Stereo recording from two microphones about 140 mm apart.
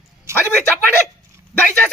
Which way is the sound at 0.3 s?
20° right (ahead or behind).